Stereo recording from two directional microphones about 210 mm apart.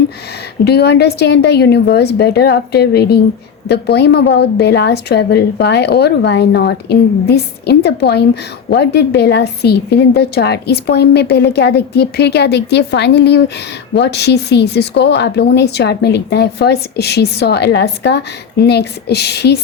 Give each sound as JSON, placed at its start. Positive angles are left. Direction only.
{"t": 0.6, "sound": "a woman's voice", "side_deg": 50}